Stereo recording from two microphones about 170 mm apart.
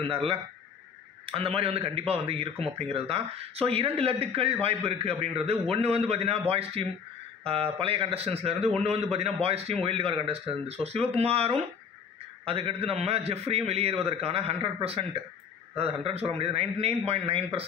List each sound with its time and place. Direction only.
0.0 s a man's voice: 35° right (ahead or behind)